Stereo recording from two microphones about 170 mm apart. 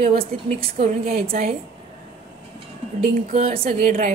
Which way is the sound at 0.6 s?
35° right (ahead or behind).